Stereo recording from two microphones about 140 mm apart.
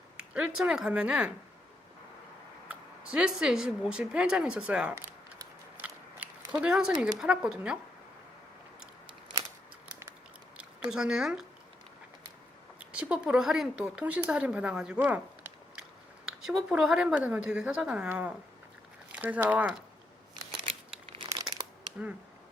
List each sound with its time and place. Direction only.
0.2 s speech: 5° right (ahead or behind)
2.6 s speech: 5° right (ahead or behind)
4.9 s a sound: 20° right (ahead or behind)
6.6 s speech: 5° right (ahead or behind)
10.9 s speech: 5° right (ahead or behind)
12.8 s speech: 10° right (ahead or behind)
20.7 s crumpling: 40° right (ahead or behind)
21.3 s crumpling: 30° right (ahead or behind)